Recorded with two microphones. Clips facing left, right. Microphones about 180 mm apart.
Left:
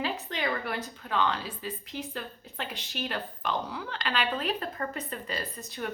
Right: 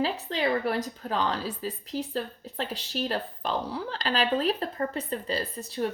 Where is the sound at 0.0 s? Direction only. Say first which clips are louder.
Right 4 dB; 35° right (ahead or behind).